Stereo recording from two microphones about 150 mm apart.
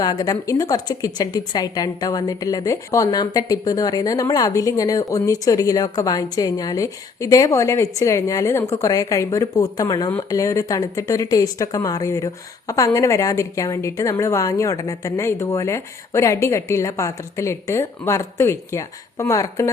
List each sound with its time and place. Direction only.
0.0 s speech: 25° left (ahead or behind)